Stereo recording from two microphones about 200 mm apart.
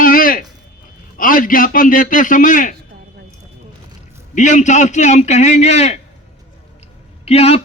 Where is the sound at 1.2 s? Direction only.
45° left (ahead or behind).